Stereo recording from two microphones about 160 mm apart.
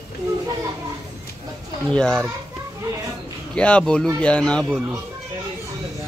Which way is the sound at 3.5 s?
5° left (ahead or behind).